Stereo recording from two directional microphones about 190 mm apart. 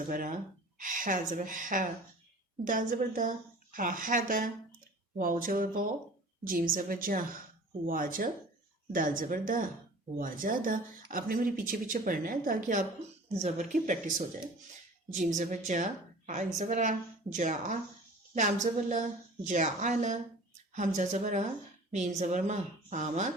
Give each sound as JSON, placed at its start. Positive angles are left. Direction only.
{"t": 0.1, "sound": "a woman's voice", "side_deg": -45}
{"t": 15.4, "sound": "a woman's voice", "side_deg": -40}